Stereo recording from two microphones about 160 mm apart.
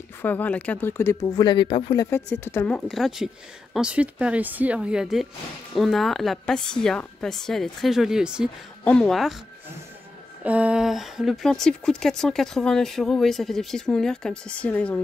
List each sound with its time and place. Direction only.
0.2 s speech: 10° left (ahead or behind); by 2.0 s 30° left (ahead or behind)
2.0 s speech: 15° left (ahead or behind)
2.9 s speech: centre (ahead or behind)
10.4 s speech: 10° right (ahead or behind); by 15.0 s 10° left (ahead or behind)